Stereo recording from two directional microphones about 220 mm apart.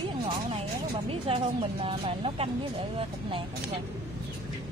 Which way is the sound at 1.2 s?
25° right (ahead or behind).